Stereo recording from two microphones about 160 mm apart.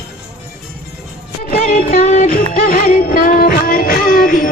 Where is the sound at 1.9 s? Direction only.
50° left (ahead or behind).